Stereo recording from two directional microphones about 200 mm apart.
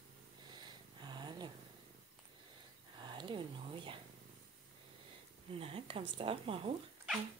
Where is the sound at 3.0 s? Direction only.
25° right (ahead or behind).